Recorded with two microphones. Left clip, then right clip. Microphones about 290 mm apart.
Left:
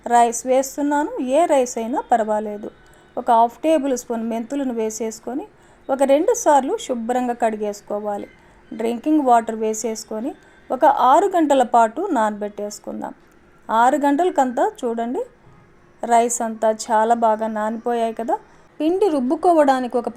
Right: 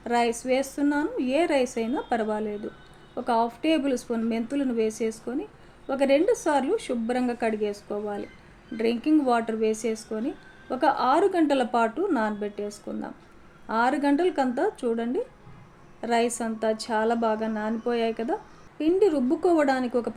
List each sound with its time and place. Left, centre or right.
0.0 s a woman's voice: left